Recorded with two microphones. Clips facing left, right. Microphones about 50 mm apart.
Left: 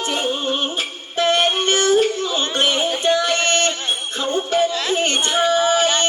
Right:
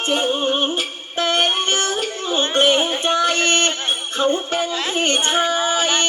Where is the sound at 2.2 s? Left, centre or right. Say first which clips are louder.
Right 3 dB; right.